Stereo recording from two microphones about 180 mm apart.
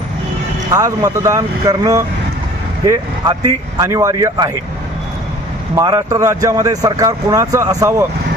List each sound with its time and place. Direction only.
0.7 s speech: 20° right (ahead or behind)
5.7 s speech: 20° right (ahead or behind)